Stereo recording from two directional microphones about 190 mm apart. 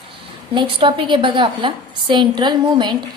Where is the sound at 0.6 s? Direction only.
25° right (ahead or behind).